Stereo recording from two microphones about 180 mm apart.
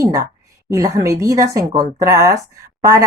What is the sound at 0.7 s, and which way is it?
A woman's voice, 20° right (ahead or behind).